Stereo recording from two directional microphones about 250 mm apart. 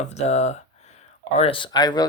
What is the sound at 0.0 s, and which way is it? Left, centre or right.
Speech, left.